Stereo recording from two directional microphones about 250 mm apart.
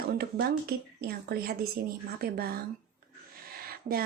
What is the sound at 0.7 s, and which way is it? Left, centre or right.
A woman's voice, right.